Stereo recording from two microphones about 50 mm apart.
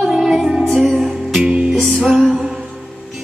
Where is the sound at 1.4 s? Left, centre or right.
Centre.